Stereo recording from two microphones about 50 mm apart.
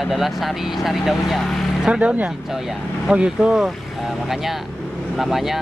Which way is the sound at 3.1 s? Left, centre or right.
Right.